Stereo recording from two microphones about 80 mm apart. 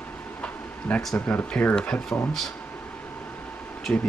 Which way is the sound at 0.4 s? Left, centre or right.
Centre.